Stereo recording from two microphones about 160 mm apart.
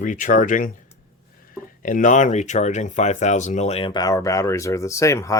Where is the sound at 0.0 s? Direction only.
55° left (ahead or behind).